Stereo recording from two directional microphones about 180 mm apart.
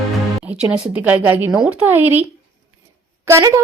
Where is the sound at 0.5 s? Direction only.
5° right (ahead or behind).